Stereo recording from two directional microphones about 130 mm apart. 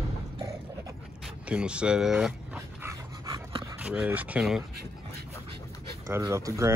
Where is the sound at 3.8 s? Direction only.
10° right (ahead or behind).